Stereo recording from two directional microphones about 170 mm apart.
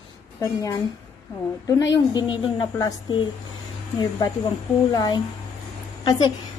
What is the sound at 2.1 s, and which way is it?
A woman's voice, 25° left (ahead or behind).